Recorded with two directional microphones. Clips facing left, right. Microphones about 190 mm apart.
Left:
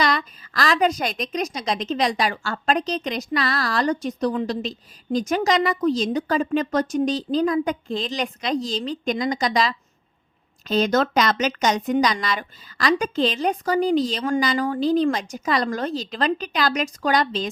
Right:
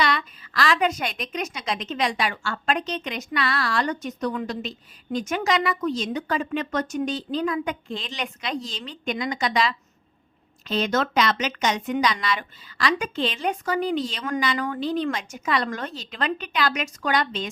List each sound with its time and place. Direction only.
0.0 s a woman's voice: 40° left (ahead or behind)